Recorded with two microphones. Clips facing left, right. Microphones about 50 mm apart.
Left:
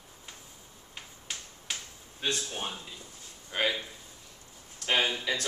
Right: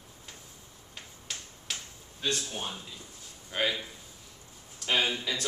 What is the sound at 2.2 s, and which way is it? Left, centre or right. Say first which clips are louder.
Speech: even; left.